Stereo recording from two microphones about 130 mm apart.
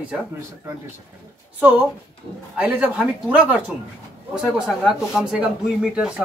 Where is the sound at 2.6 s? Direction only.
10° right (ahead or behind).